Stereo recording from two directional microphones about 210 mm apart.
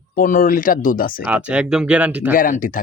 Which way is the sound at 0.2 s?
40° left (ahead or behind).